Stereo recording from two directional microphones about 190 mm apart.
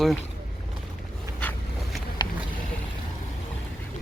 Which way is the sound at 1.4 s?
10° left (ahead or behind).